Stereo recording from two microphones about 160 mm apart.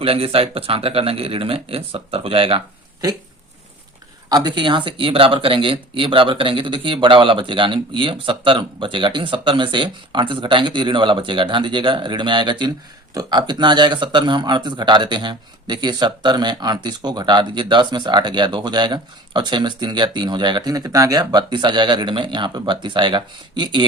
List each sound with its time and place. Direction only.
0.0 s speech: 35° right (ahead or behind)
4.3 s speech: 25° right (ahead or behind)